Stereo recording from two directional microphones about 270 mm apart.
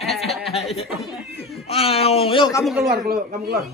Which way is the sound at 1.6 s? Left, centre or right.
Left.